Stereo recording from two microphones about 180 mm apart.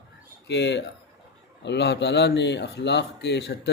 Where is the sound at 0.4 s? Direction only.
75° left (ahead or behind).